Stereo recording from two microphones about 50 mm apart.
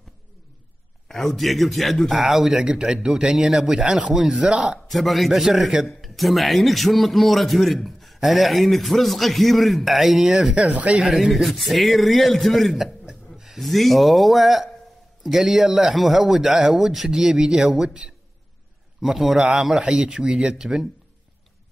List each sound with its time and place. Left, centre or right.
1.0 s a man's voice: centre
2.5 s speech: centre
4.8 s a man's voice: centre
10.5 s a man's voice: right
11.0 s a man's voice: centre
12.8 s chuckle: centre
13.6 s a man's voice: centre
18.9 s a man's voice: centre